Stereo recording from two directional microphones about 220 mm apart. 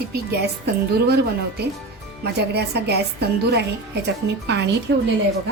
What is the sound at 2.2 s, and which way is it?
A woman's voice, 50° right (ahead or behind).